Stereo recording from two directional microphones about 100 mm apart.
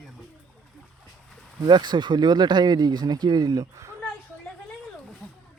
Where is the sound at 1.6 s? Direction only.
50° right (ahead or behind).